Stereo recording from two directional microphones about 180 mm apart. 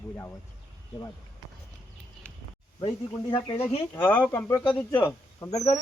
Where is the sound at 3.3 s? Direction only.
30° left (ahead or behind).